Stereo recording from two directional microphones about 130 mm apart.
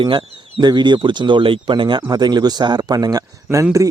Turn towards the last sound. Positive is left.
turn(degrees=-25)  # may be behind; listen again after turning